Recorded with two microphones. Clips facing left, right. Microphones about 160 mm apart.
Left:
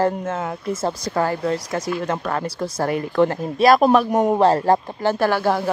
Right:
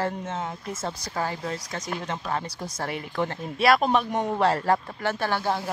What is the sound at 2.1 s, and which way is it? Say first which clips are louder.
Speech: left 5 dB; 75° left (ahead or behind).